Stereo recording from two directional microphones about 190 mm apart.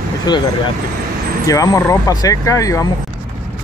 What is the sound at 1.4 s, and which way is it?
Speech, 15° left (ahead or behind).